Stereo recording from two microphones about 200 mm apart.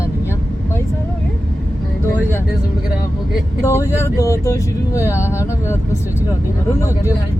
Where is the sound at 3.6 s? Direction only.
15° left (ahead or behind).